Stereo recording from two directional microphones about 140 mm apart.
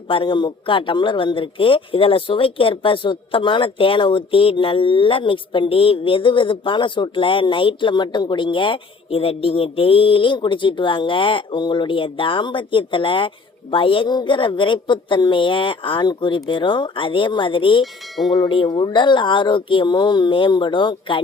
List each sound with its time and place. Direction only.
0.1 s a man's voice: 35° left (ahead or behind)